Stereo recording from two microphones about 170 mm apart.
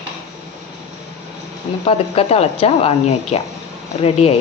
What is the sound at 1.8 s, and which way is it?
Speech, 35° left (ahead or behind).